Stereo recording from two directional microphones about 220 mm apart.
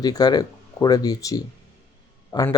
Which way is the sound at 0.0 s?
20° left (ahead or behind).